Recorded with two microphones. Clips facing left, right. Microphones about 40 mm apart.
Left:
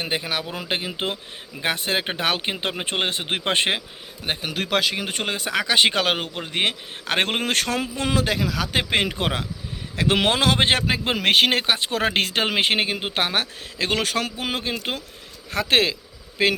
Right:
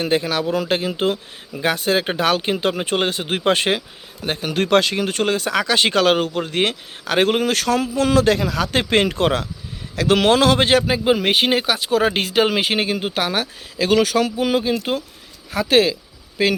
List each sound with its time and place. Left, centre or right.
0.0 s a man's voice: centre
4.3 s speech: centre
4.5 s speech: centre
5.0 s speech: centre
7.1 s a man's voice: left
8.1 s speech: centre
8.4 s a man's voice: centre; by 11.6 s left
11.6 s a man's voice: left
12.1 s speech: left
12.4 s a man's voice: left
12.9 s speech: left
13.1 s a man's voice: left